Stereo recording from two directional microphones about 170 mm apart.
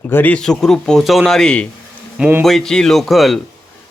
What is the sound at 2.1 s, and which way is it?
Speech, 10° right (ahead or behind).